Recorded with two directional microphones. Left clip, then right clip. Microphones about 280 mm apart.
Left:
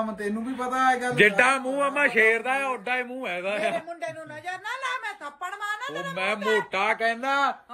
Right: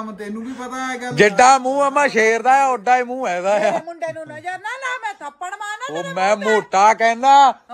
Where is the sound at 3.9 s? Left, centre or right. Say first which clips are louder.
Right 7 dB; right.